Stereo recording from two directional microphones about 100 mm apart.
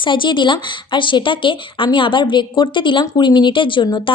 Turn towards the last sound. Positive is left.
turn(degrees=50)  # may be behind; listen again after turning